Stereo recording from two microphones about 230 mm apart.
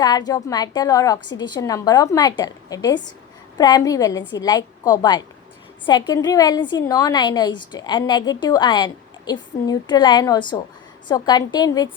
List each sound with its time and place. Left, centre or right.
0.0 s a woman's voice: centre